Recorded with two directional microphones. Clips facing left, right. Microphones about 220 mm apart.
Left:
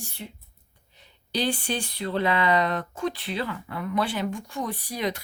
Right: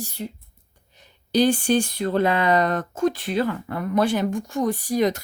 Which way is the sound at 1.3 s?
45° right (ahead or behind).